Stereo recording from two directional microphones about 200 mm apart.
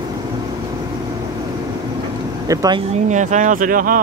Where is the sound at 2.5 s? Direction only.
20° right (ahead or behind).